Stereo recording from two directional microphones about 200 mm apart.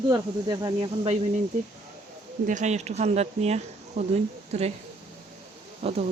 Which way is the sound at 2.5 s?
35° right (ahead or behind).